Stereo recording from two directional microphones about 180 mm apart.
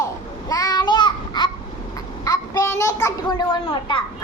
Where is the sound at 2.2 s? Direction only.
20° left (ahead or behind).